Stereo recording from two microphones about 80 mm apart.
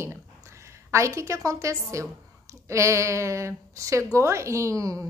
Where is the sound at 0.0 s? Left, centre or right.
Right.